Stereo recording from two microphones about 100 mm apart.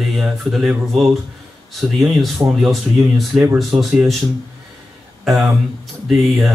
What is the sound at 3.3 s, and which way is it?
Speech, centre (ahead or behind).